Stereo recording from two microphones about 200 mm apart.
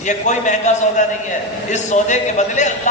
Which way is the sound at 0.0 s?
40° left (ahead or behind).